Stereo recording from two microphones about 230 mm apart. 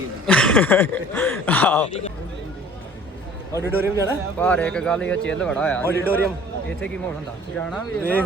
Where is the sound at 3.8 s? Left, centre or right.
Centre.